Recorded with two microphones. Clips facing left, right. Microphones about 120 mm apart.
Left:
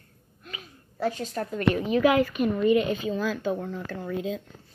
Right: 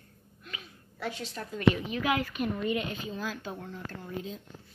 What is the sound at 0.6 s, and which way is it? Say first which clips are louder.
A woman's voice: left 10 dB; 40° left (ahead or behind).